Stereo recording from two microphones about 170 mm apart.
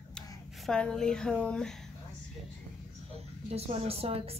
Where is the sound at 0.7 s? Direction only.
5° left (ahead or behind).